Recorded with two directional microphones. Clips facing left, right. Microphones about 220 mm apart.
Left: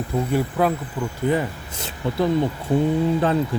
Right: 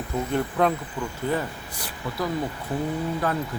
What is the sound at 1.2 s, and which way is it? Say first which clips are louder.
A man's voice: left 6 dB; 15° left (ahead or behind).